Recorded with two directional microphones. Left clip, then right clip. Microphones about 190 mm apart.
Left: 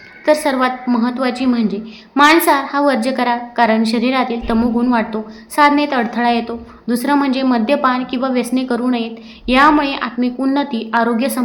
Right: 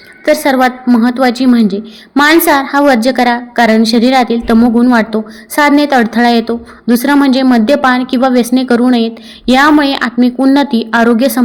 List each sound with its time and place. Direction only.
0.3 s a woman's voice: 30° right (ahead or behind)